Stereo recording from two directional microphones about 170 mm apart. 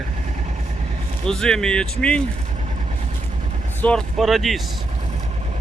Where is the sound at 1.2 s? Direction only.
5° left (ahead or behind).